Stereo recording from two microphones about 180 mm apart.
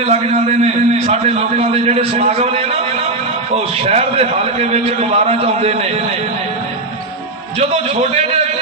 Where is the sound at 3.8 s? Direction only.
35° right (ahead or behind).